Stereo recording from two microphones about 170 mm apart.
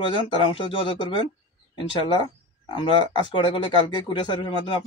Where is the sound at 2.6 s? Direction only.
30° left (ahead or behind).